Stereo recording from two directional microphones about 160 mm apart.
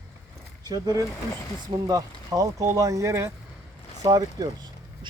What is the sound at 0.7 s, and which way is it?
Speech, 25° right (ahead or behind).